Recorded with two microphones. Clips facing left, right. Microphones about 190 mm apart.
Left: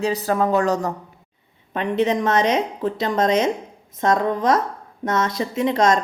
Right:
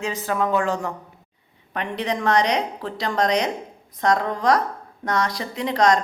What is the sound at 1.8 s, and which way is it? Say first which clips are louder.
A woman's voice: left 6 dB; 20° left (ahead or behind).